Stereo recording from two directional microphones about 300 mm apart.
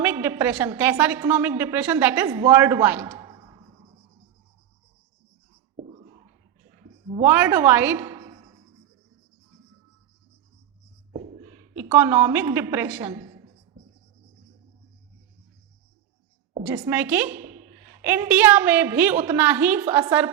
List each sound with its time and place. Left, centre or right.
0.0 s a woman's voice: centre
5.7 s a sound: right
7.2 s a woman's voice: centre
11.7 s a woman's voice: centre
16.6 s a woman's voice: centre